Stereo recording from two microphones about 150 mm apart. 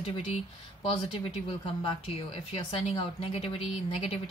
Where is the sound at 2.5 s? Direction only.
40° left (ahead or behind).